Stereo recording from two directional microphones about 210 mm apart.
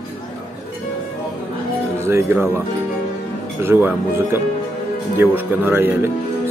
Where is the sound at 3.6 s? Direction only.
10° right (ahead or behind).